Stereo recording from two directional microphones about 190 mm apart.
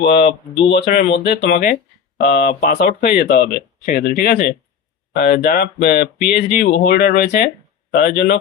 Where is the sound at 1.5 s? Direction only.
45° left (ahead or behind).